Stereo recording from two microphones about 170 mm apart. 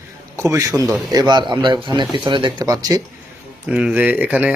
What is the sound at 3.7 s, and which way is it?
Speech, 5° right (ahead or behind).